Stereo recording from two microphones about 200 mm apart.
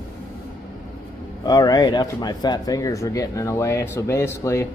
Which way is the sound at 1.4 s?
20° left (ahead or behind).